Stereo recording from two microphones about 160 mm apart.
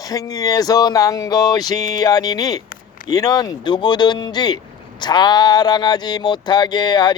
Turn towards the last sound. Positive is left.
turn(degrees=25)  # may be behind; listen again after turning